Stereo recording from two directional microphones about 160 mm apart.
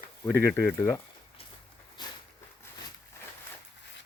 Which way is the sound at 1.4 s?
35° left (ahead or behind).